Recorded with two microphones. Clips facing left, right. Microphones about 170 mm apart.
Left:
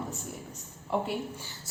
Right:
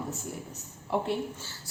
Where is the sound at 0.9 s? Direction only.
5° right (ahead or behind).